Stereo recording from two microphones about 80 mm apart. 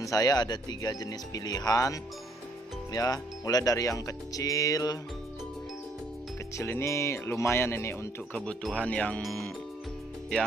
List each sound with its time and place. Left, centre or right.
0.0 s speech: left
6.5 s speech: left
8.3 s speech: centre
9.2 s speech: centre